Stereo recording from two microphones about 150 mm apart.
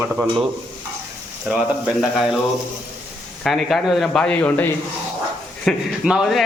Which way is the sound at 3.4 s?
Centre (ahead or behind).